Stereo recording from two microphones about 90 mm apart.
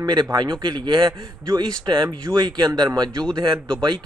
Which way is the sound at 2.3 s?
55° right (ahead or behind).